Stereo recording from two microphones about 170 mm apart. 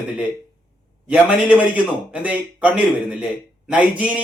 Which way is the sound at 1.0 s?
10° right (ahead or behind).